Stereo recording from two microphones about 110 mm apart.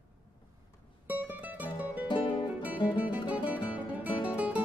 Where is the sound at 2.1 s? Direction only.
50° left (ahead or behind).